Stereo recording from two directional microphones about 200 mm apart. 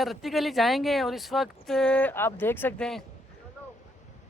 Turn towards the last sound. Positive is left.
turn(degrees=5)  # may be behind; listen again after turning